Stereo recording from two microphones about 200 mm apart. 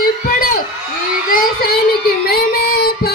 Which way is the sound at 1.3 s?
45° left (ahead or behind).